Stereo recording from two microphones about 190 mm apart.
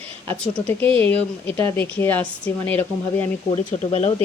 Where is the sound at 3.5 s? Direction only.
35° left (ahead or behind).